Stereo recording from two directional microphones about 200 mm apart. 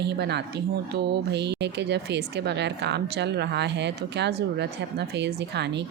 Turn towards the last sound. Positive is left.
turn(degrees=-55)  # may be behind; listen again after turning